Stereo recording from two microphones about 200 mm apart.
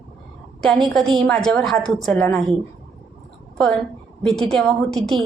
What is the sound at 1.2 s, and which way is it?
A woman's voice, 5° left (ahead or behind).